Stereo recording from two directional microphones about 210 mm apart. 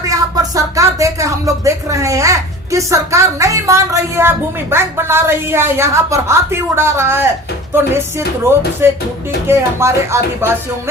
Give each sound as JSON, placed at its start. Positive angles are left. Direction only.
{"t": 0.0, "sound": "speech", "side_deg": -15}
{"t": 8.8, "sound": "speech", "side_deg": -10}